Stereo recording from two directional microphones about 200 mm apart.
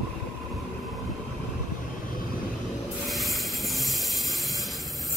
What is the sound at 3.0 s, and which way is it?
Train, centre (ahead or behind).